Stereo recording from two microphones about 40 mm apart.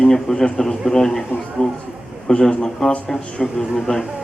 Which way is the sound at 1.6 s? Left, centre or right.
Left.